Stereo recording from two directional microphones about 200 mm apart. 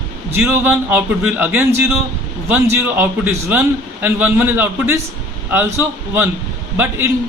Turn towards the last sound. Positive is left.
turn(degrees=-10)  # may be behind; listen again after turning